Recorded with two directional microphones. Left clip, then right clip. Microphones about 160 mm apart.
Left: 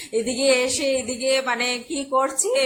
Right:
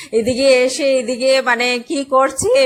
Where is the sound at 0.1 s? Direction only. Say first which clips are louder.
Right 7 dB; 30° right (ahead or behind).